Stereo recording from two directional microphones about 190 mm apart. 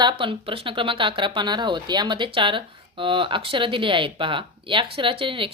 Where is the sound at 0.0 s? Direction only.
25° right (ahead or behind).